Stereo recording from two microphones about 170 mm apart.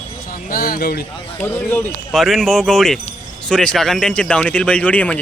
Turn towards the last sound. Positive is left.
turn(degrees=10)  # may be behind; listen again after turning